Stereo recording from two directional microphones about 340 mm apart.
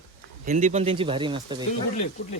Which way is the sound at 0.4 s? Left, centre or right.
Right.